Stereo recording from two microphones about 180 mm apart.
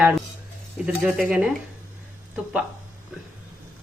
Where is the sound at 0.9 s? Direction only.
5° right (ahead or behind).